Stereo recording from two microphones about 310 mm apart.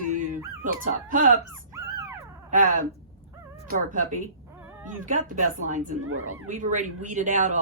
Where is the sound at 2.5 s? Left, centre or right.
Right.